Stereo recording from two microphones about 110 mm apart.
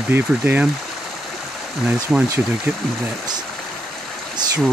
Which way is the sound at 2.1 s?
5° right (ahead or behind).